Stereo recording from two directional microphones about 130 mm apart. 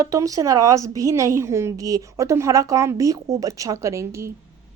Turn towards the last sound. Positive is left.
turn(degrees=-20)  # may be behind; listen again after turning